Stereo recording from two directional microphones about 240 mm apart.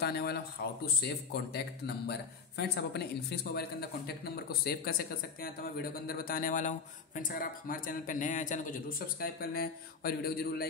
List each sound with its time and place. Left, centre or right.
0.0 s a man's voice: left